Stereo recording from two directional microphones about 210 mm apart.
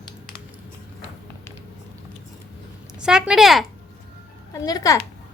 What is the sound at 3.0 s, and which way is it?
Speech, 5° right (ahead or behind).